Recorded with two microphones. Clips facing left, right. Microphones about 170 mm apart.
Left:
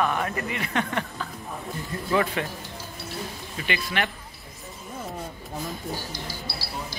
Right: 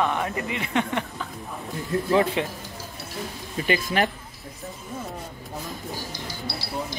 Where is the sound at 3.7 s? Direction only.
40° right (ahead or behind).